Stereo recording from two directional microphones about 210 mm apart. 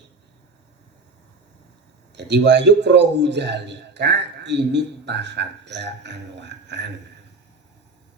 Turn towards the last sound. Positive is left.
turn(degrees=-55)  # may be behind; listen again after turning